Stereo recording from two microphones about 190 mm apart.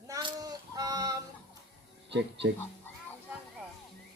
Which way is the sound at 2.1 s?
65° right (ahead or behind).